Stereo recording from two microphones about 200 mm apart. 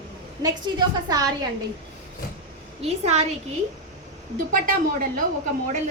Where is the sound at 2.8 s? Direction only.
30° right (ahead or behind).